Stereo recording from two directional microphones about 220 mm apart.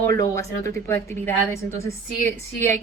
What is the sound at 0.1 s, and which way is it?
A woman's voice, 15° left (ahead or behind).